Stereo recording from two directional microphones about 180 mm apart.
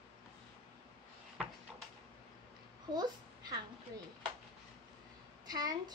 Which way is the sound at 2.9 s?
20° right (ahead or behind).